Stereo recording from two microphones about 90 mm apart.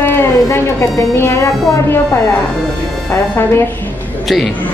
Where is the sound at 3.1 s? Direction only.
25° left (ahead or behind).